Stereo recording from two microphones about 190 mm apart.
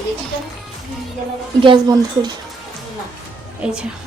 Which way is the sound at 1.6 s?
25° right (ahead or behind).